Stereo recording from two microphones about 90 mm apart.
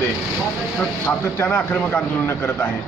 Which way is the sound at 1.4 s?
20° left (ahead or behind).